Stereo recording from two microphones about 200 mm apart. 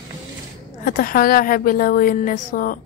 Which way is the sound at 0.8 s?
45° left (ahead or behind).